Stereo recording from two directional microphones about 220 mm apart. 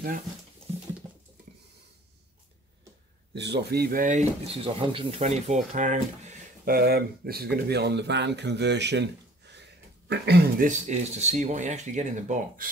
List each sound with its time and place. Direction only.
3.3 s speech: 50° right (ahead or behind)
10.9 s speech: 30° right (ahead or behind)